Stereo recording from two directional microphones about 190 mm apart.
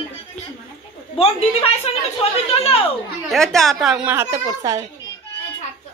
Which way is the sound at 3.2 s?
Centre (ahead or behind).